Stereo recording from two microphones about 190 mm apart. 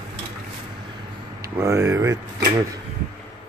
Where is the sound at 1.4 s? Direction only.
15° right (ahead or behind).